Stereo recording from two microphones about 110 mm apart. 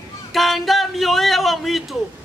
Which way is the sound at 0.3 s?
Centre (ahead or behind).